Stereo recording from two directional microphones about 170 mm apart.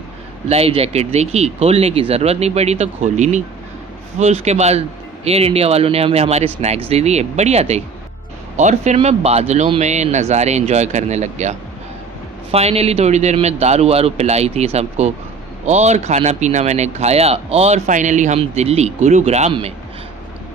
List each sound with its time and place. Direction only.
0.4 s speech: 35° right (ahead or behind)